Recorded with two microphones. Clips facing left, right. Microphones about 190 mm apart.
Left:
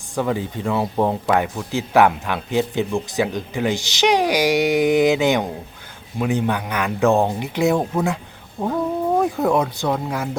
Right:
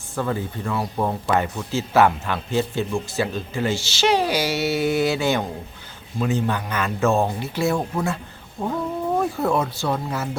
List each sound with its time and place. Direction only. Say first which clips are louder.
0.2 s speech: left 3 dB; 15° left (ahead or behind)